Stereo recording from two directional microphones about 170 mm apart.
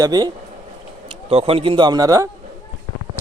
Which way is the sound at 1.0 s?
35° right (ahead or behind).